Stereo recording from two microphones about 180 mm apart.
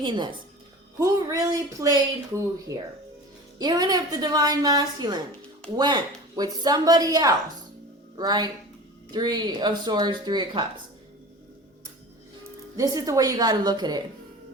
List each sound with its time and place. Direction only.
0.0 s speech: 25° right (ahead or behind)
12.7 s speech: 20° right (ahead or behind)